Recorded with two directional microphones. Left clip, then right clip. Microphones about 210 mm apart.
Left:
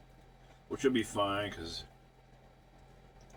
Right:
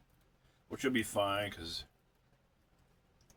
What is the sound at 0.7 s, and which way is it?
Speech, 25° right (ahead or behind).